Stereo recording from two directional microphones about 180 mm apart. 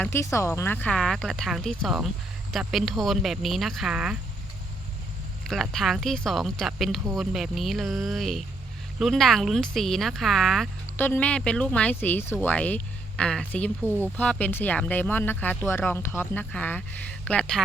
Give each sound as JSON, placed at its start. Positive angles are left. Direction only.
{"t": 0.0, "sound": "speech", "side_deg": 15}
{"t": 5.5, "sound": "speech", "side_deg": 0}
{"t": 13.8, "sound": "speech", "side_deg": -15}
{"t": 14.2, "sound": "speech", "side_deg": 10}